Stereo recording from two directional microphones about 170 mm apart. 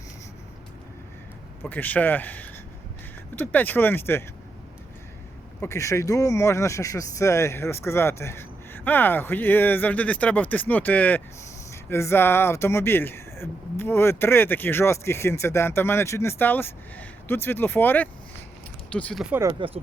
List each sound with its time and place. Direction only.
1.6 s speech: 10° left (ahead or behind)
5.5 s speech: 15° left (ahead or behind)
19.2 s speech: 10° right (ahead or behind)
19.5 s speech: 30° right (ahead or behind)